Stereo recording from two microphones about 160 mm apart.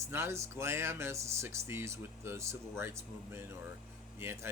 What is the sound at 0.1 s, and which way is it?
Speech, 15° right (ahead or behind).